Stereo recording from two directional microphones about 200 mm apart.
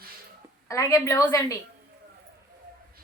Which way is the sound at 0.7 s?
15° left (ahead or behind).